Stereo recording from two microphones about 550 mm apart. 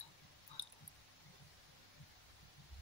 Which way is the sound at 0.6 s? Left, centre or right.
Left.